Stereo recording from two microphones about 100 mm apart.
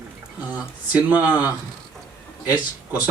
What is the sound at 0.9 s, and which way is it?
Speech, 15° right (ahead or behind).